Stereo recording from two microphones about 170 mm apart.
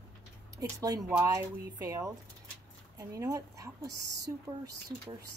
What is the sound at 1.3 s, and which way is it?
A woman's voice, 20° right (ahead or behind).